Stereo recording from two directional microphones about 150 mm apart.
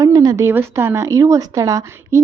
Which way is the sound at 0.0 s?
25° right (ahead or behind).